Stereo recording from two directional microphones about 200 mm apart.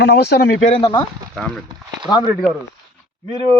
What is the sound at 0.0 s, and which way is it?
Speech, 55° left (ahead or behind).